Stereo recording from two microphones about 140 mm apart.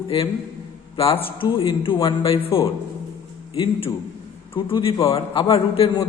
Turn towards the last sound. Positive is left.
turn(degrees=40)  # may be behind; listen again after turning